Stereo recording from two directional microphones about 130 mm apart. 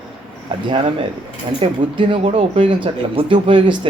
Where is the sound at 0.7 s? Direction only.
40° right (ahead or behind).